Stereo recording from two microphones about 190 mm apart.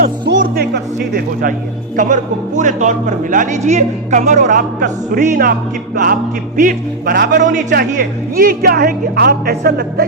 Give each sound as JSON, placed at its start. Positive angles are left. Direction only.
{"t": 0.3, "sound": "music", "side_deg": -50}
{"t": 2.0, "sound": "speech", "side_deg": -40}